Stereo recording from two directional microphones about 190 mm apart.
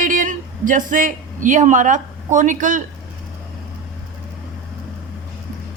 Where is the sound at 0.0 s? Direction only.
45° right (ahead or behind).